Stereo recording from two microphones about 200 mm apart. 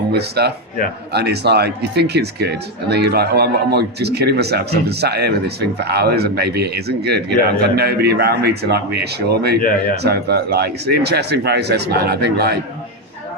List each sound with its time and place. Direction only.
0.1 s speech: 55° right (ahead or behind)